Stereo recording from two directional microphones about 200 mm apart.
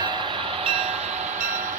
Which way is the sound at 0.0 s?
25° right (ahead or behind).